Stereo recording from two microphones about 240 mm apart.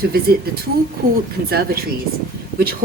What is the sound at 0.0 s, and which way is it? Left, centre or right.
A woman's voice, right.